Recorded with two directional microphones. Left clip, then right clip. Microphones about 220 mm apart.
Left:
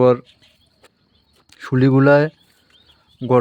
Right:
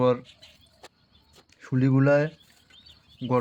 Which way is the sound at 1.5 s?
50° left (ahead or behind).